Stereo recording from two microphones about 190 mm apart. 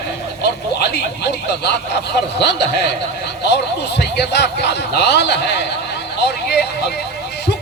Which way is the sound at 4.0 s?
60° left (ahead or behind).